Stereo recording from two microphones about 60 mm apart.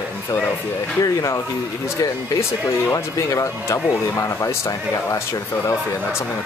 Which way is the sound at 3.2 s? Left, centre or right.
Left.